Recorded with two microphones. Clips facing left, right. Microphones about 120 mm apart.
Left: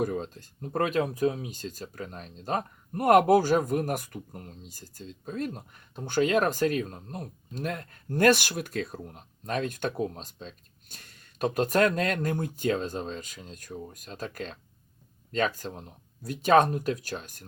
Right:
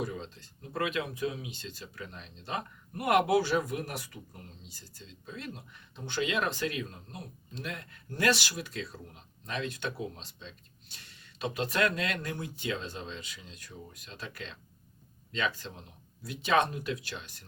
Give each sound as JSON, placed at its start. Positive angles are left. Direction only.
{"t": 0.0, "sound": "speech", "side_deg": 50}